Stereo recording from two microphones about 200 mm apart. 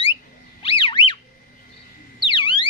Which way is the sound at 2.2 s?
25° left (ahead or behind).